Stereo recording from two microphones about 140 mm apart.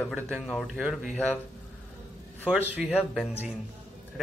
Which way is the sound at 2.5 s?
5° right (ahead or behind).